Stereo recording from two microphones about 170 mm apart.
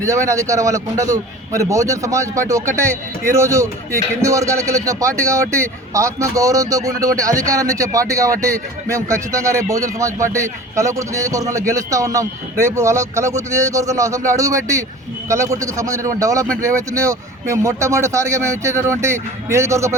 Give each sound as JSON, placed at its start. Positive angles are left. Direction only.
{"t": 0.0, "sound": "a man's voice", "side_deg": -15}